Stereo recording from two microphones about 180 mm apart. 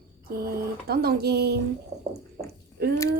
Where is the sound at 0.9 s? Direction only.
60° right (ahead or behind).